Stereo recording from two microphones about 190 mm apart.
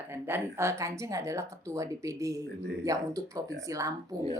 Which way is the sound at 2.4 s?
60° right (ahead or behind).